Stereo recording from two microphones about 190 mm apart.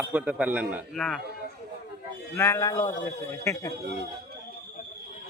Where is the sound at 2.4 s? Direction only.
15° left (ahead or behind).